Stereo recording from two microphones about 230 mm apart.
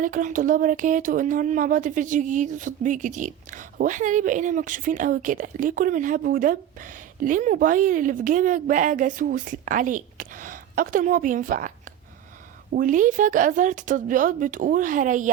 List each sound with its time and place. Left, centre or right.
0.0 s speech: right